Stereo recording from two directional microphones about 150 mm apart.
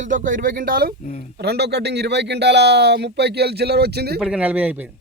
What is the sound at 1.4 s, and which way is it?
Speech, 90° right.